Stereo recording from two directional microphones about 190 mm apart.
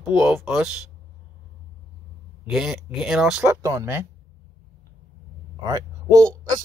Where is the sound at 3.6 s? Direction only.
15° right (ahead or behind).